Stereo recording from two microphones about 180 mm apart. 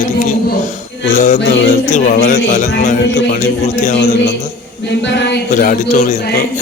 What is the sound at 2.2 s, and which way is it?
Music, 45° left (ahead or behind).